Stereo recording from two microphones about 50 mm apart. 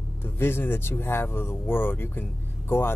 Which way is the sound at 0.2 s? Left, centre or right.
Left.